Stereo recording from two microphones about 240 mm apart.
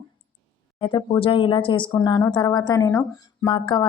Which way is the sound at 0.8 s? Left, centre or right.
Left.